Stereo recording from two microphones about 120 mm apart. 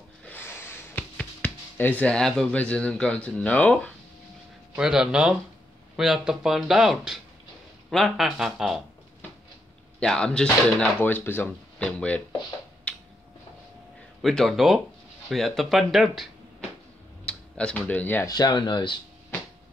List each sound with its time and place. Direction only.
0.2 s a sound: 15° left (ahead or behind)
1.1 s speech: 10° left (ahead or behind)
4.7 s speech: 5° right (ahead or behind)
9.9 s speech: 5° left (ahead or behind)
11.0 s speech: 15° left (ahead or behind)
12.9 s a sound: 10° left (ahead or behind)
14.2 s speech: centre (ahead or behind)
17.3 s speech: 10° left (ahead or behind)
18.2 s speech: 35° left (ahead or behind)